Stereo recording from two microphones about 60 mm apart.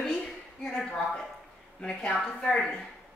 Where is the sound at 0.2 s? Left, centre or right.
Centre.